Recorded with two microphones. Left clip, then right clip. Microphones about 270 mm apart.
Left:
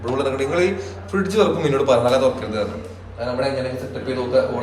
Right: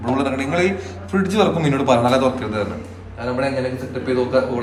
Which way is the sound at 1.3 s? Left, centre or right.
Centre.